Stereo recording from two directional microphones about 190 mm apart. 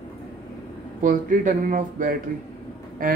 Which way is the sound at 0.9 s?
40° right (ahead or behind).